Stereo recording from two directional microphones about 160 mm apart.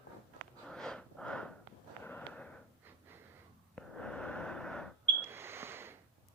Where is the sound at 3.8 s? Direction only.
5° left (ahead or behind).